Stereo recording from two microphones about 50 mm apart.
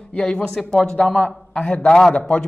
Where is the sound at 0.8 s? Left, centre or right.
Centre.